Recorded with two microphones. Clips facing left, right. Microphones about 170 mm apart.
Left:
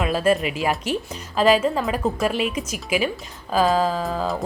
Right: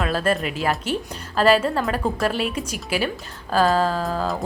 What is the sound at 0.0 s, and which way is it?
Speech, 5° left (ahead or behind).